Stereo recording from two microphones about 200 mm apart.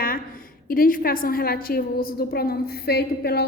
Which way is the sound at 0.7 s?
45° left (ahead or behind).